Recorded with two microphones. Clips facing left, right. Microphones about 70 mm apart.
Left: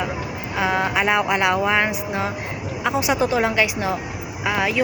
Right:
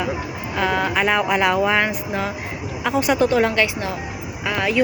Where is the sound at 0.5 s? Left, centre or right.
Centre.